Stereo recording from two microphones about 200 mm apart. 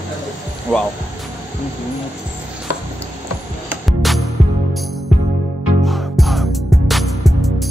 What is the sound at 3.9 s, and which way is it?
Music, centre (ahead or behind).